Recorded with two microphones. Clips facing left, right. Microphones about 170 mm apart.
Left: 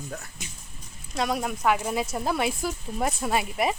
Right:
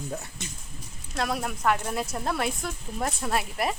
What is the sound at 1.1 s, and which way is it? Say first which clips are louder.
Speech: left 2 dB; centre (ahead or behind).